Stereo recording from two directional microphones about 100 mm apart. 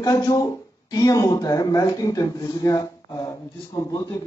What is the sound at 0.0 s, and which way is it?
Speech, 35° left (ahead or behind).